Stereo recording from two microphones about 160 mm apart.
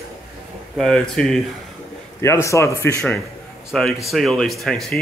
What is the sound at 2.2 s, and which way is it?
Speech, 20° left (ahead or behind).